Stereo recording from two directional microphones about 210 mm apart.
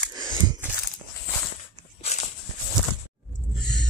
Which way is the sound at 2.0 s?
30° left (ahead or behind).